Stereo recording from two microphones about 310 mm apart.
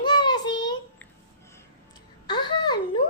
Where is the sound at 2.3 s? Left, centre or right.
Centre.